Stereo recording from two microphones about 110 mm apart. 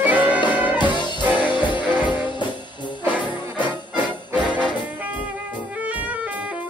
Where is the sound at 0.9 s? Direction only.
45° left (ahead or behind).